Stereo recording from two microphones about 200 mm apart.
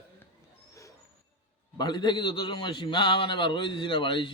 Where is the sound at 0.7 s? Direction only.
15° left (ahead or behind).